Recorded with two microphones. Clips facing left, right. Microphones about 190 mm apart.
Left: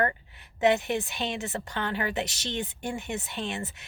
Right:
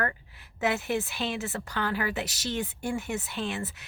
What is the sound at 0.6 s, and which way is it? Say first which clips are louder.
A woman's voice: left 4 dB; 20° left (ahead or behind).